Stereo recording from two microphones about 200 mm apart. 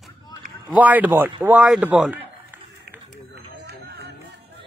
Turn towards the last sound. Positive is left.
turn(degrees=-55)  # may be behind; listen again after turning